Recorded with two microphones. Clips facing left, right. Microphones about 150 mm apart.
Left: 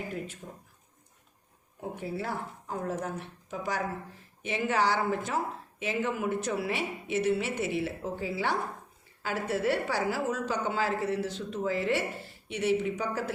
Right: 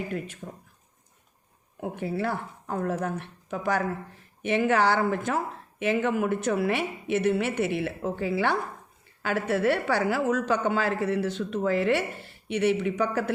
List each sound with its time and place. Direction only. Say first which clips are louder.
1.8 s a woman's voice: right 6 dB; 70° right (ahead or behind)